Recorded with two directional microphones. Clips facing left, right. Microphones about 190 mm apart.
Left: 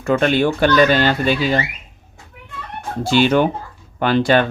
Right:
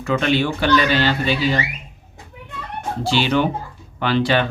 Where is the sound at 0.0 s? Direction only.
50° left (ahead or behind).